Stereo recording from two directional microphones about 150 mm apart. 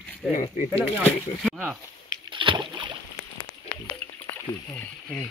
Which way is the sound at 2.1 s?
35° right (ahead or behind).